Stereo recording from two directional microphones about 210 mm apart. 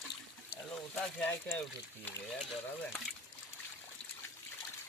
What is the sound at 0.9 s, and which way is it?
Speech, 5° left (ahead or behind).